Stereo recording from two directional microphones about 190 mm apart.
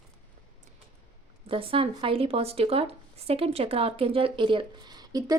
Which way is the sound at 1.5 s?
30° right (ahead or behind).